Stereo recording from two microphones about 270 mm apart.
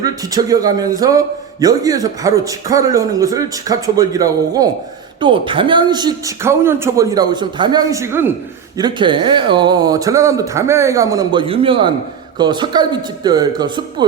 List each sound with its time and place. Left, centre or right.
0.0 s speech: centre